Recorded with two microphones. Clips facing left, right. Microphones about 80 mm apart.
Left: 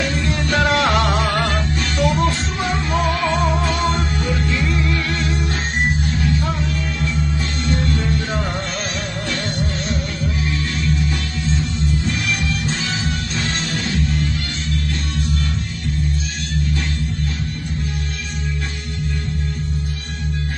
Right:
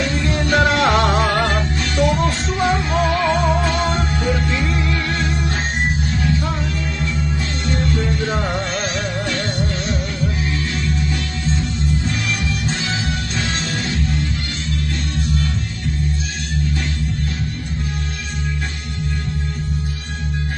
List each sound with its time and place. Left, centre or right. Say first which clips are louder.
0.3 s music: right 2 dB; right
4.4 s music: even; right